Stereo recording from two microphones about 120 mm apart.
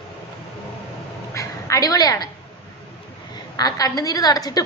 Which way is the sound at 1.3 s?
30° left (ahead or behind).